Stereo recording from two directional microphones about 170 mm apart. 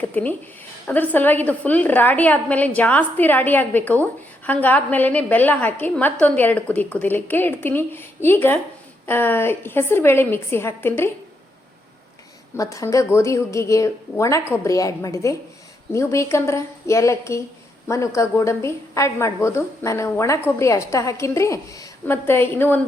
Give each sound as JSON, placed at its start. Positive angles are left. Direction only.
{"t": 0.0, "sound": "a woman's voice", "side_deg": 10}
{"t": 12.5, "sound": "a woman's voice", "side_deg": 20}